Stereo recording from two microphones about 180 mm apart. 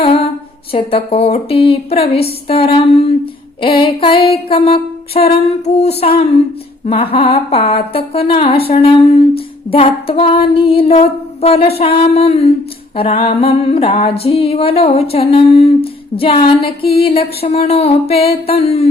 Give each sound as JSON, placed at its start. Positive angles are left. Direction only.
{"t": 0.7, "sound": "speech", "side_deg": 30}